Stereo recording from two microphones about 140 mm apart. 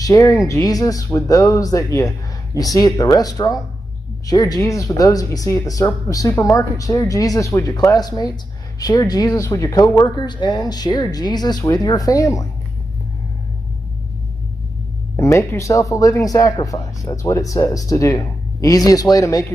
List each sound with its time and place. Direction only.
0.0 s speech: 25° left (ahead or behind)
15.1 s speech: 20° left (ahead or behind)